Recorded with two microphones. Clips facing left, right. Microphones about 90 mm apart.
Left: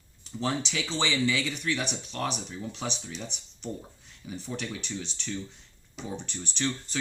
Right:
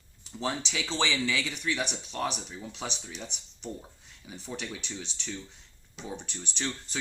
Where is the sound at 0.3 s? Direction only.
20° right (ahead or behind).